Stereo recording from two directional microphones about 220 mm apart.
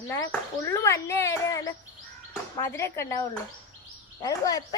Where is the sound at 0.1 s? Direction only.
15° left (ahead or behind).